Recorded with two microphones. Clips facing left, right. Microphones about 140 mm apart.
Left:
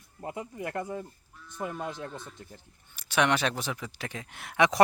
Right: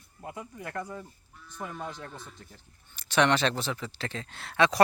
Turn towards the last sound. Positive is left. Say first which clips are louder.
# even
turn(degrees=15)  # may be behind; listen again after turning